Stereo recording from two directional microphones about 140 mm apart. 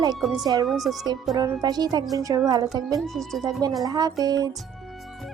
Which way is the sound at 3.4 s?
25° right (ahead or behind).